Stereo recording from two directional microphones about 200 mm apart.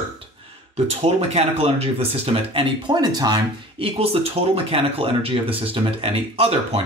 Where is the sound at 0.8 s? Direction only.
30° right (ahead or behind).